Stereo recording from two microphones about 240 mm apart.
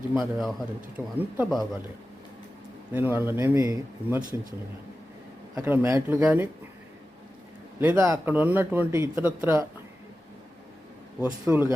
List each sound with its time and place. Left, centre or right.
0.1 s speech: centre
2.9 s speech: centre
5.5 s speech: centre
7.8 s speech: centre
11.2 s speech: centre